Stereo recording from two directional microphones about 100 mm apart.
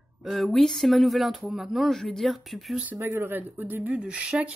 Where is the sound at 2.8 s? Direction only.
20° right (ahead or behind).